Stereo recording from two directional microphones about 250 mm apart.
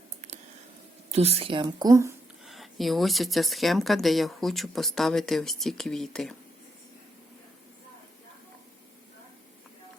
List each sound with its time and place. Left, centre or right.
1.1 s a woman's voice: right
2.5 s speech: centre